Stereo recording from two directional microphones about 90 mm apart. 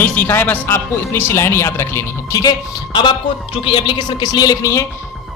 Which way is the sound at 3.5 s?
75° left (ahead or behind).